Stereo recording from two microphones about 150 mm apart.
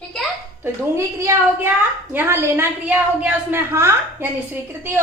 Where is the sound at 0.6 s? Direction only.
20° right (ahead or behind).